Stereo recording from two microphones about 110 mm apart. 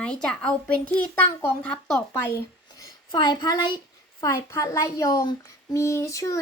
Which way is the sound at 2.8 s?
40° left (ahead or behind).